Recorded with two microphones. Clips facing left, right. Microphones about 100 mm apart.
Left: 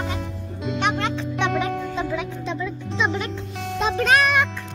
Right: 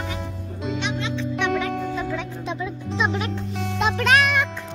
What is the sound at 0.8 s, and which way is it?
Music, 55° left (ahead or behind).